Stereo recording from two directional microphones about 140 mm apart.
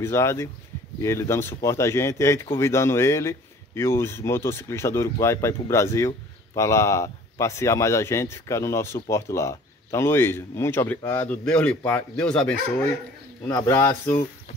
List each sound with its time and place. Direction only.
0.0 s a man's voice: 20° left (ahead or behind)
11.4 s speech: 10° left (ahead or behind)
13.5 s a man's voice: 20° left (ahead or behind)